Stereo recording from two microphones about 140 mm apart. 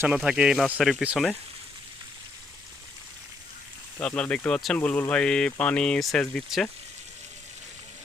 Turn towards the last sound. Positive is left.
turn(degrees=0)  # may be behind; listen again after turning